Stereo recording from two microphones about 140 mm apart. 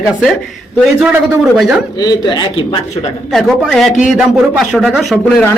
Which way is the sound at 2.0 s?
35° left (ahead or behind).